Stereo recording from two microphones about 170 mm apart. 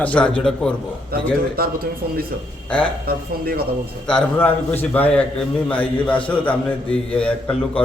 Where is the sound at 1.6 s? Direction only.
60° right (ahead or behind).